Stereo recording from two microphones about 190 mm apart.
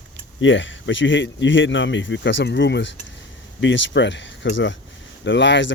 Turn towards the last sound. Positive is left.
turn(degrees=70)  # may be behind; listen again after turning